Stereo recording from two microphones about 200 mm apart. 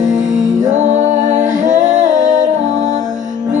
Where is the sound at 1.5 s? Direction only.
40° right (ahead or behind).